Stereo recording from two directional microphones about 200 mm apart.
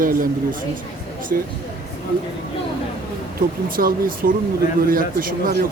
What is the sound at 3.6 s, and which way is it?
Speech, 45° right (ahead or behind).